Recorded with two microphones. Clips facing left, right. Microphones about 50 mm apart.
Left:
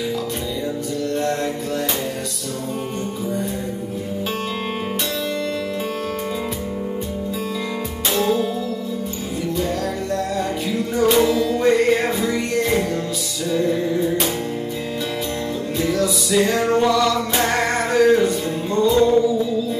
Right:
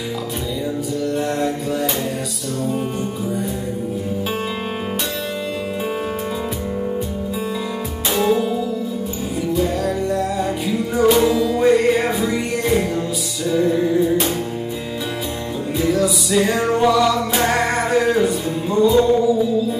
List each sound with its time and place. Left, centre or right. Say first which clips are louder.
1.1 s mantra: even; centre
8.2 s music: right 2 dB; centre
11.0 s music: right 1 dB; centre
15.8 s music: right 3 dB; centre